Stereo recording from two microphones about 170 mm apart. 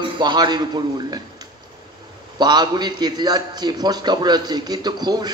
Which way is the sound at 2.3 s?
25° right (ahead or behind).